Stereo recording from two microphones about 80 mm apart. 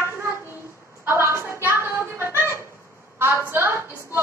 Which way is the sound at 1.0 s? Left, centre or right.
Right.